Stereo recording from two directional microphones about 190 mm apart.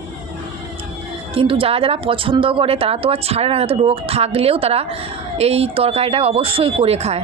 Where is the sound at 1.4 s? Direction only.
30° right (ahead or behind).